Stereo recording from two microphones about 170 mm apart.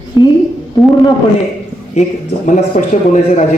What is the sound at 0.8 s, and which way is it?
Speech, centre (ahead or behind).